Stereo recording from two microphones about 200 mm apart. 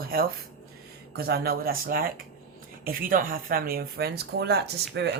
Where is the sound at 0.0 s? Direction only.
50° right (ahead or behind).